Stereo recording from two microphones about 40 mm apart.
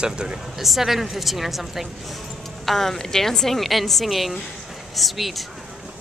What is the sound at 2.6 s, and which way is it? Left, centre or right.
Speech, centre.